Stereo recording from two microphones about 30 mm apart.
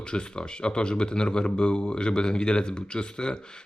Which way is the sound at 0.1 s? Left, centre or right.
Left.